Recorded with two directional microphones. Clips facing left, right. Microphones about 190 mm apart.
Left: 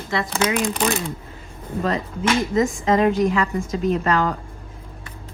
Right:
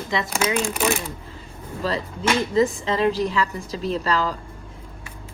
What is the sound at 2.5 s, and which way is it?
A woman's voice, 30° right (ahead or behind).